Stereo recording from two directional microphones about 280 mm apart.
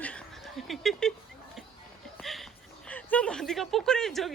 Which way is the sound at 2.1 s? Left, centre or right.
Centre.